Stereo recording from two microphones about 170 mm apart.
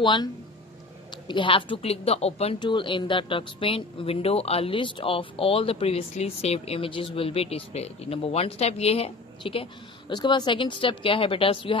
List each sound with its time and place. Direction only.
0.0 s speech: 25° left (ahead or behind)